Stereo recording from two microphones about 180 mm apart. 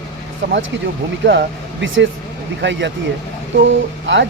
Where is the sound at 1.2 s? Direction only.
80° right.